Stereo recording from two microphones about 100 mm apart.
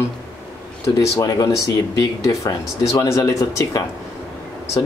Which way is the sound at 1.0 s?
40° left (ahead or behind).